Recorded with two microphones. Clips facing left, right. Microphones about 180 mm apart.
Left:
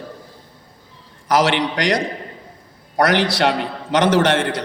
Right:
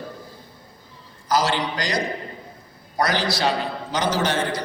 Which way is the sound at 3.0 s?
75° left (ahead or behind).